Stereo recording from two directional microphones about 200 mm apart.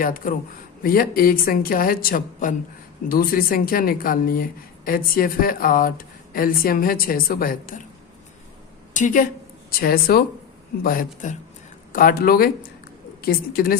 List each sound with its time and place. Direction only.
0.0 s speech: 45° left (ahead or behind)
8.9 s speech: 40° left (ahead or behind)